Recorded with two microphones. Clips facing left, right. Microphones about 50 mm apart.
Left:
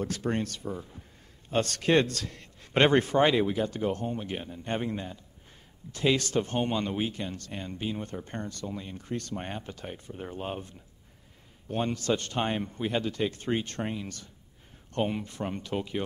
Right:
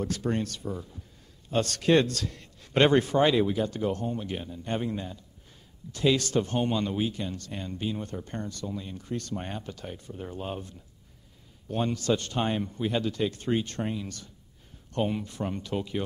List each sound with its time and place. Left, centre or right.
0.0 s a man's voice: left
7.5 s speech: left